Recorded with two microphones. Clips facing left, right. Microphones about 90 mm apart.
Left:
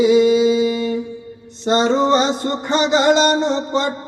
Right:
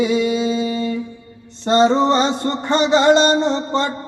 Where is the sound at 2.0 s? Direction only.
10° left (ahead or behind).